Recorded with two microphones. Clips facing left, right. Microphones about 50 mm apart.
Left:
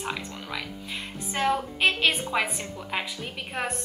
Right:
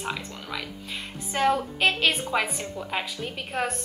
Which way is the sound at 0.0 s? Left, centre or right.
Centre.